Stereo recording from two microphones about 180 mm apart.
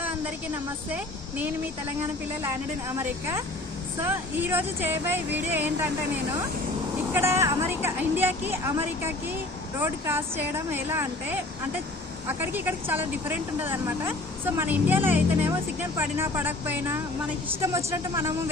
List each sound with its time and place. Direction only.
0.0 s a woman's voice: 10° right (ahead or behind)
7.1 s speech: 15° right (ahead or behind)
12.4 s speech: 10° right (ahead or behind)